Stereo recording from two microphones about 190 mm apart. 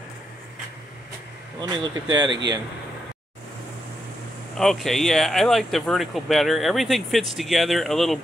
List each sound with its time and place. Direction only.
1.6 s speech: 20° right (ahead or behind)
4.6 s speech: centre (ahead or behind)